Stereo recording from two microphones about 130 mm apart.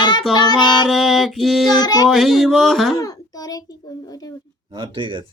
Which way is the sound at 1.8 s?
30° left (ahead or behind).